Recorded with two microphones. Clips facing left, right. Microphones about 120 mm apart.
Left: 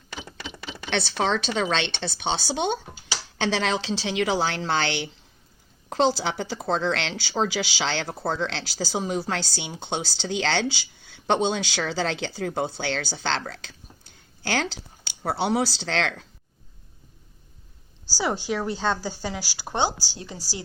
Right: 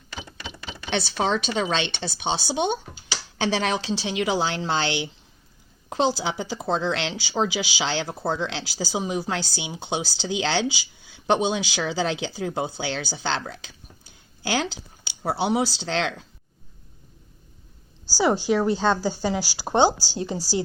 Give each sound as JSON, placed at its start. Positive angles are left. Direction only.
{"t": 0.2, "sound": "a woman's voice", "side_deg": -5}
{"t": 6.6, "sound": "speech", "side_deg": -20}
{"t": 18.2, "sound": "speech", "side_deg": -25}